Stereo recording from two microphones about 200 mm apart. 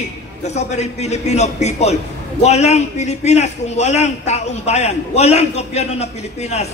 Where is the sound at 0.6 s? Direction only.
35° left (ahead or behind).